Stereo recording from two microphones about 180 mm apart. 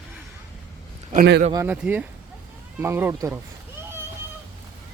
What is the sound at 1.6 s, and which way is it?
A man's voice, 10° right (ahead or behind).